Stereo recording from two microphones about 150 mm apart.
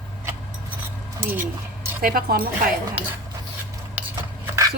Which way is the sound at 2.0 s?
80° right.